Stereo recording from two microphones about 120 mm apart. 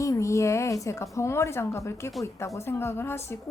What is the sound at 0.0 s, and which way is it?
A woman's voice, 25° left (ahead or behind).